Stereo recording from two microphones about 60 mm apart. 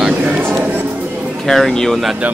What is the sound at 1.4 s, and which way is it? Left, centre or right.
Speech, centre.